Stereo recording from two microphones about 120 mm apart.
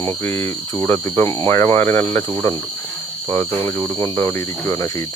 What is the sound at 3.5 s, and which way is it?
Speech, 50° right (ahead or behind).